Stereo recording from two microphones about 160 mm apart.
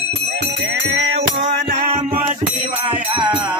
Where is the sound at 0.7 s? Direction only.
90° right.